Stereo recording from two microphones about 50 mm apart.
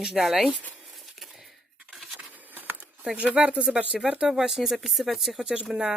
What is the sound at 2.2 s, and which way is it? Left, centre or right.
Patter, right.